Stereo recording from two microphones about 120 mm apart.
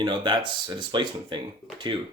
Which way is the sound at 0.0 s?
40° right (ahead or behind).